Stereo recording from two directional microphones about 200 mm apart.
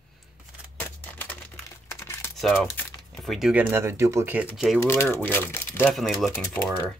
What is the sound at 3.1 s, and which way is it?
Speech, centre (ahead or behind).